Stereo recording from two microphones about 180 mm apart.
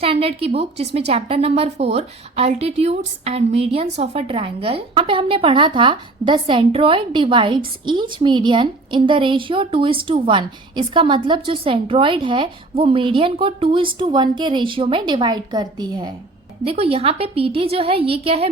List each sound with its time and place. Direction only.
0.0 s a woman's voice: 30° right (ahead or behind)
16.6 s a woman's voice: 35° right (ahead or behind)